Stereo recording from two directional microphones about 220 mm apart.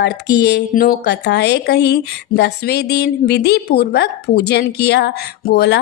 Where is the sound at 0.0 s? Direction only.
50° left (ahead or behind).